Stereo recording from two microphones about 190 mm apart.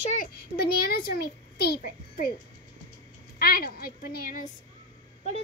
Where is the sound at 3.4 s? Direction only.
50° left (ahead or behind).